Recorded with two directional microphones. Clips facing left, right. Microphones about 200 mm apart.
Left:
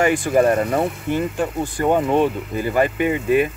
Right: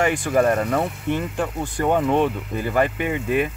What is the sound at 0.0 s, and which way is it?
Speech, 5° left (ahead or behind).